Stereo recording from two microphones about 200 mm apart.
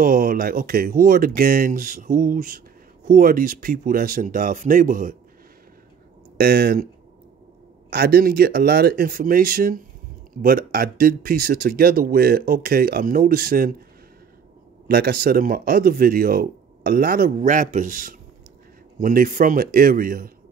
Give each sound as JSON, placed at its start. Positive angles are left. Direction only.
{"t": 0.0, "sound": "speech", "side_deg": -45}
{"t": 6.3, "sound": "speech", "side_deg": -50}
{"t": 7.9, "sound": "speech", "side_deg": -50}
{"t": 14.9, "sound": "speech", "side_deg": -50}